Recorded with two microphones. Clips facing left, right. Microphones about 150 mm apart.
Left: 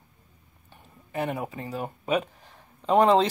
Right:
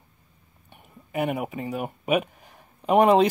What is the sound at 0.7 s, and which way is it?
Speech, 15° right (ahead or behind).